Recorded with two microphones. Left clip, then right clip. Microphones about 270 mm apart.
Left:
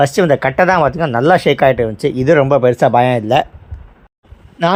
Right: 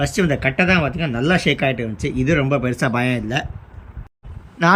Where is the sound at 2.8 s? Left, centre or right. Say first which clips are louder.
Left 10 dB; centre.